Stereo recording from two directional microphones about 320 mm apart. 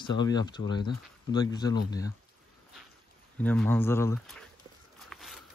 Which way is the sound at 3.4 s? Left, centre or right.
Centre.